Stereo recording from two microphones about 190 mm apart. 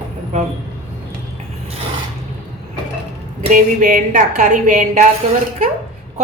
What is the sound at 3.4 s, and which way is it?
A woman's voice, 40° right (ahead or behind).